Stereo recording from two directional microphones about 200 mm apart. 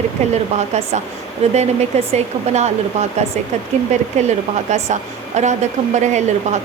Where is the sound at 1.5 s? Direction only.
35° right (ahead or behind).